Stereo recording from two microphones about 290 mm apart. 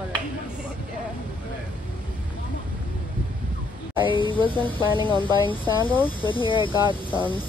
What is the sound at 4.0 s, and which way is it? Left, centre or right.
Speech, centre.